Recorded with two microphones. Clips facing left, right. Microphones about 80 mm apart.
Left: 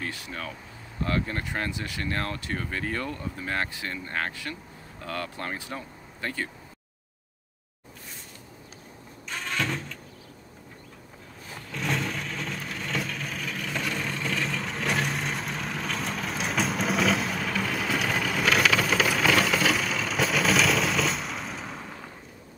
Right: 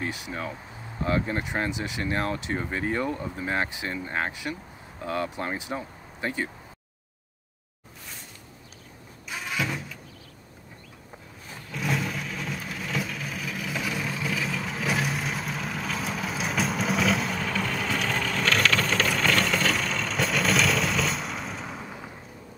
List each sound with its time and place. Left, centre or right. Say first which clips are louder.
0.0 s speech: right 3 dB; centre
9.3 s vehicle: even; centre
11.7 s vehicle: right 1 dB; centre